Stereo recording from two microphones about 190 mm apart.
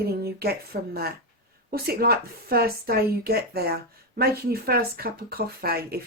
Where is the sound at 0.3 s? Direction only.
55° right (ahead or behind).